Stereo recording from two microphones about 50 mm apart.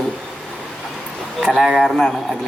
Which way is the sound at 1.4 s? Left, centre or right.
Centre.